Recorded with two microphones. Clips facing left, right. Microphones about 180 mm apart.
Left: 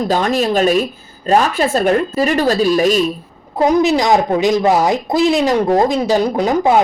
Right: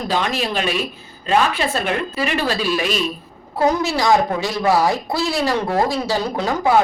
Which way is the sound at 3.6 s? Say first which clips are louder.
Left 5 dB; 15° left (ahead or behind).